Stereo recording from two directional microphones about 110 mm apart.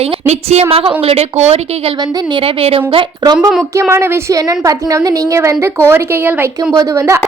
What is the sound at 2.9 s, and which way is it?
Speech, 45° right (ahead or behind).